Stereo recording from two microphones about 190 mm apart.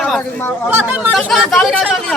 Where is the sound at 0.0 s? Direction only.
5° left (ahead or behind).